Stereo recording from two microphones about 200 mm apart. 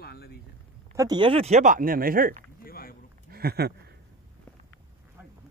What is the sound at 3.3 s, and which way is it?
Speech, 50° right (ahead or behind).